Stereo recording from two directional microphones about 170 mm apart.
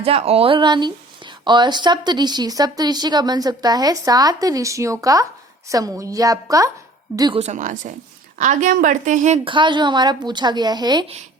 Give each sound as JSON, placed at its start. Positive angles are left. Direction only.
{"t": 0.0, "sound": "speech", "side_deg": -35}
{"t": 7.3, "sound": "a woman's voice", "side_deg": -45}
{"t": 9.4, "sound": "speech", "side_deg": -30}